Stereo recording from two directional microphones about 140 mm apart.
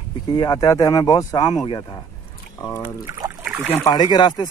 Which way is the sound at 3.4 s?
10° right (ahead or behind).